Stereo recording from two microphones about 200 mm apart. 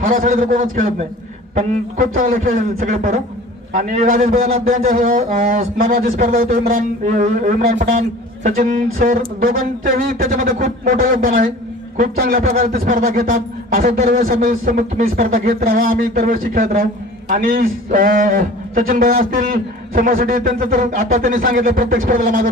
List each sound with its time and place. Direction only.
0.0 s a man's voice: 40° right (ahead or behind)